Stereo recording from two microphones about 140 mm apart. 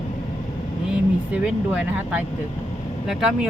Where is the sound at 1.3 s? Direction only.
10° right (ahead or behind).